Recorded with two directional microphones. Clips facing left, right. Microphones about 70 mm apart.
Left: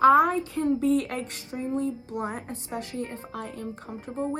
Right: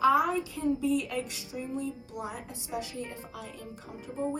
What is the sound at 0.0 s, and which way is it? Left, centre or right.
Speech, left.